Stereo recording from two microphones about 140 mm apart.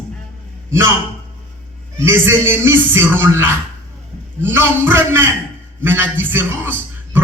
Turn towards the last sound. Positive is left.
turn(degrees=-15)  # may be behind; listen again after turning